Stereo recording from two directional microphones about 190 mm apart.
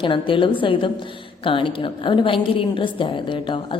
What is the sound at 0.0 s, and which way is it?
A woman's voice, 25° left (ahead or behind).